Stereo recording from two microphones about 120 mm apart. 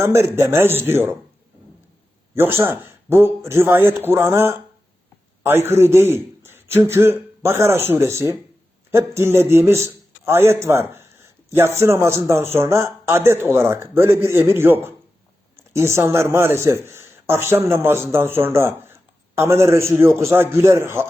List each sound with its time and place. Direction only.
0.0 s a man's voice: 20° right (ahead or behind)
2.3 s a man's voice: 20° right (ahead or behind)